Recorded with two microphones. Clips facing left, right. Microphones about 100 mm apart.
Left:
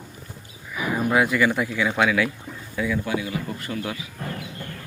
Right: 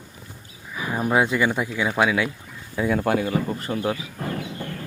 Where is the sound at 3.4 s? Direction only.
30° right (ahead or behind).